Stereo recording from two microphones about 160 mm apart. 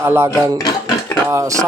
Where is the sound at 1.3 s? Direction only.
20° right (ahead or behind).